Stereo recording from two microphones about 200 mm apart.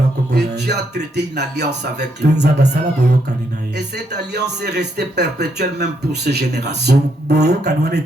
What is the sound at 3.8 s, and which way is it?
Speech, 55° right (ahead or behind).